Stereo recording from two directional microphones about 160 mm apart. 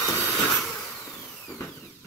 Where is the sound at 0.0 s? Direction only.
20° left (ahead or behind).